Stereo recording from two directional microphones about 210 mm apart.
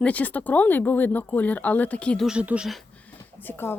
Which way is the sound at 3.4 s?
10° left (ahead or behind).